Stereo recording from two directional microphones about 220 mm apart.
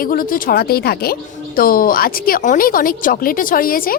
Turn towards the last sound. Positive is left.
turn(degrees=40)  # may be behind; listen again after turning